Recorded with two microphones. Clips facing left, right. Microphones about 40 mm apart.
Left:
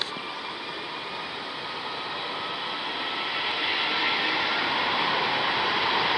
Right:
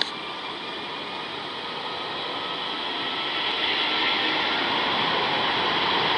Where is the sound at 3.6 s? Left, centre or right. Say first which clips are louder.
Right 1 dB; centre.